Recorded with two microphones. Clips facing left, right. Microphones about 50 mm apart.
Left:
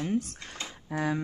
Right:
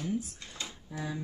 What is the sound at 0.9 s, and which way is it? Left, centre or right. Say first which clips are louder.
Speech: left 9 dB; left.